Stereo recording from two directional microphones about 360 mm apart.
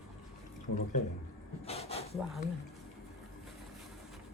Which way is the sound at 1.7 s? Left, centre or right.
Centre.